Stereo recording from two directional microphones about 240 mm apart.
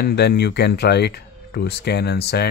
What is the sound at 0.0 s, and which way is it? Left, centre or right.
Speech, left.